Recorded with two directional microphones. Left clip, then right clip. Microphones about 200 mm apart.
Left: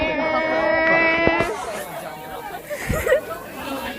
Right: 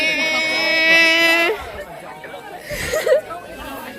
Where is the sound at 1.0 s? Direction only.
75° right (ahead or behind).